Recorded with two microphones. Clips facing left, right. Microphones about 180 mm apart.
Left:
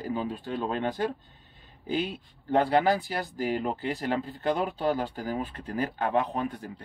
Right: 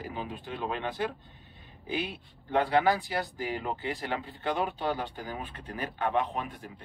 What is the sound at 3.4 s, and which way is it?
Speech, 40° left (ahead or behind).